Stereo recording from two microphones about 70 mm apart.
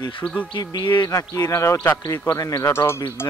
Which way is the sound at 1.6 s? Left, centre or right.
Left.